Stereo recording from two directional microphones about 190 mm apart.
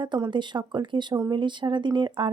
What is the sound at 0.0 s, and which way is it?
A woman's voice, 25° right (ahead or behind).